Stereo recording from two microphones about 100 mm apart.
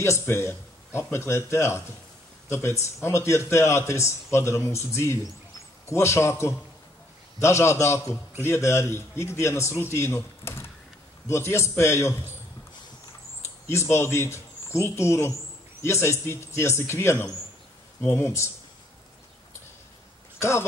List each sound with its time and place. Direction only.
0.0 s speech: 25° left (ahead or behind)
13.7 s speech: 25° left (ahead or behind)
20.3 s speech: 25° left (ahead or behind)